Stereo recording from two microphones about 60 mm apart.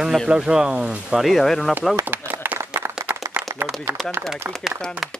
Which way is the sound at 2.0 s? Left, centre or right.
Right.